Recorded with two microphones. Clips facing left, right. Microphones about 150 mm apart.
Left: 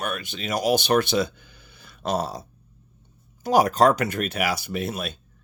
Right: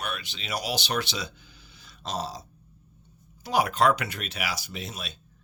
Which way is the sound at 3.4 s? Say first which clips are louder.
Left 5 dB; 45° left (ahead or behind).